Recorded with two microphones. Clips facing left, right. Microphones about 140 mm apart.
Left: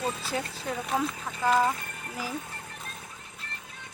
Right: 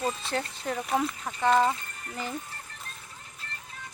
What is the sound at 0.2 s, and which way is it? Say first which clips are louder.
Speech: right 1 dB; 5° left (ahead or behind).